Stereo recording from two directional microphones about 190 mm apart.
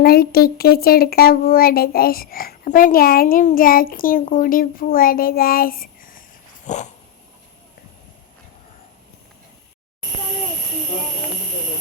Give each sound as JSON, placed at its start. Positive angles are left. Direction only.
{"t": 0.0, "sound": "a child's voice", "side_deg": 55}
{"t": 6.7, "sound": "dog", "side_deg": 40}